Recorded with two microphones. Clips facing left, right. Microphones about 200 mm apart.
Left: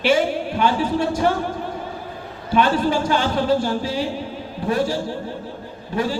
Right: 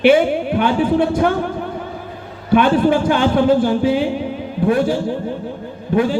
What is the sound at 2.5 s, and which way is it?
A man's voice, 55° right (ahead or behind).